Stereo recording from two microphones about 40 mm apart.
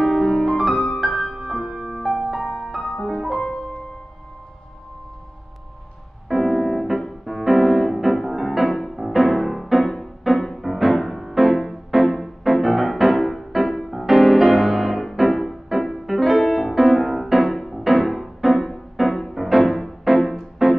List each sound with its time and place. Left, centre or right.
0.0 s music: centre
2.8 s music: centre
3.1 s music: centre
3.3 s music: centre
6.2 s piano: centre
10.2 s music: centre